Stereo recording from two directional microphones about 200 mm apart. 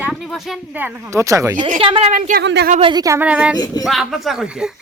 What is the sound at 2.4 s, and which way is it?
Speech, 55° right (ahead or behind).